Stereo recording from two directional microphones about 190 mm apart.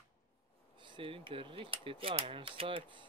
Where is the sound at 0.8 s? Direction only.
25° right (ahead or behind).